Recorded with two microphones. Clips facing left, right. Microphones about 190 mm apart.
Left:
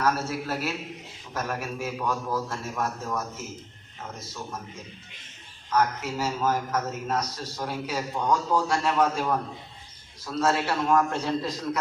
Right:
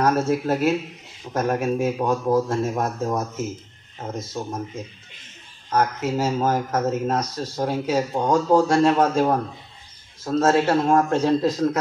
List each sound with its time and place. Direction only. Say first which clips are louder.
0.0 s a man's voice: right 7 dB; 50° right (ahead or behind)
5.7 s a man's voice: right 4 dB; 45° right (ahead or behind)